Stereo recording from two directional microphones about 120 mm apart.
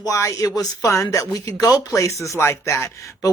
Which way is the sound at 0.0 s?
25° left (ahead or behind).